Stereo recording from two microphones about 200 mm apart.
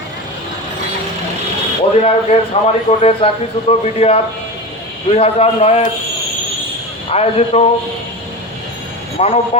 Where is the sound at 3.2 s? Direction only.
30° left (ahead or behind).